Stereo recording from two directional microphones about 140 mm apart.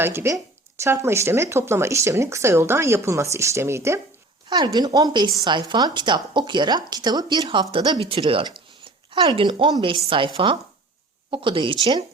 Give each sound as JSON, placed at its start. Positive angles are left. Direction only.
{"t": 0.0, "sound": "speech", "side_deg": -15}
{"t": 4.4, "sound": "a woman's voice", "side_deg": -30}